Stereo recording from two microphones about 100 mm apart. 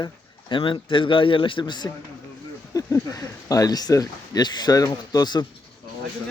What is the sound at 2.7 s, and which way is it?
Speech, 35° left (ahead or behind).